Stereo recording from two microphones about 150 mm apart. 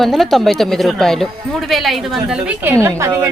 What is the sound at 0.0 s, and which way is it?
A woman's voice, centre (ahead or behind).